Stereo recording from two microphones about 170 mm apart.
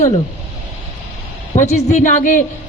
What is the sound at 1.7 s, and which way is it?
Speech, 45° left (ahead or behind).